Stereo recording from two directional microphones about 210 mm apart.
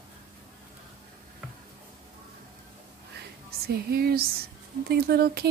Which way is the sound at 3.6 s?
50° right (ahead or behind).